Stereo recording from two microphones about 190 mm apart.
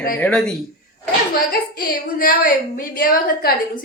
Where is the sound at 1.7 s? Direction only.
50° left (ahead or behind).